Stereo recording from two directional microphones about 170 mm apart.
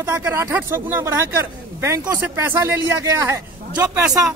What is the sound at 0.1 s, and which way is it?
Speech, 15° right (ahead or behind).